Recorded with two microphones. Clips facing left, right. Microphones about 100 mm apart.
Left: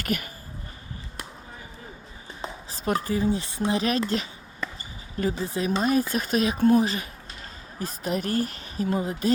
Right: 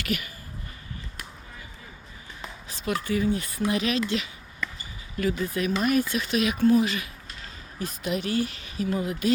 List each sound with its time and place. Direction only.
0.0 s speech: 40° left (ahead or behind)
2.4 s speech: 35° left (ahead or behind)
3.8 s a sound: 40° left (ahead or behind)
5.1 s a woman's voice: 30° left (ahead or behind)